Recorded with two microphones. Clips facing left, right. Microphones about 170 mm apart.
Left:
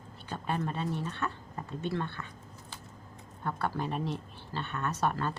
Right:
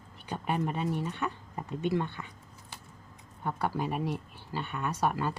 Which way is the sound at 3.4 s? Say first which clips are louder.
Right 2 dB; 15° right (ahead or behind).